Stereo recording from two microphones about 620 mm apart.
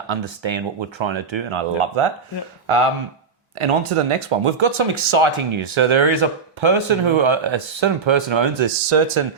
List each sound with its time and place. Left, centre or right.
0.1 s speech: right